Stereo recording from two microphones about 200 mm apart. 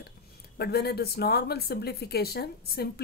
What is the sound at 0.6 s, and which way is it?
Speech, 50° left (ahead or behind).